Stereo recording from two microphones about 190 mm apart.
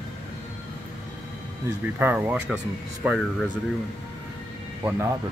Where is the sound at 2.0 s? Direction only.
10° right (ahead or behind).